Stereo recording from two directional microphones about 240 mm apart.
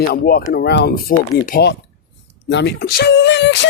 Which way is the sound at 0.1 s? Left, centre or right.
Left.